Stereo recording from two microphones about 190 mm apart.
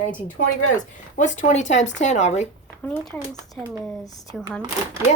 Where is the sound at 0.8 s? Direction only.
40° left (ahead or behind).